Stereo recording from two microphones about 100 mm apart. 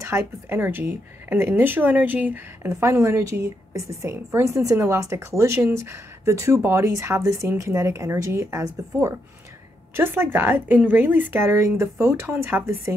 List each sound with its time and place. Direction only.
0.0 s speech: 25° right (ahead or behind)